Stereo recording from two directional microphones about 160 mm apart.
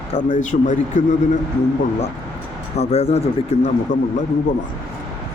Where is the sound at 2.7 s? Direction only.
40° left (ahead or behind).